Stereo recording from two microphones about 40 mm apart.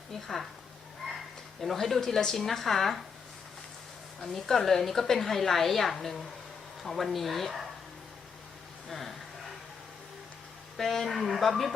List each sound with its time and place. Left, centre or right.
0.1 s speech: centre
1.6 s speech: centre
4.2 s a woman's voice: centre
8.9 s speech: centre
10.8 s a woman's voice: centre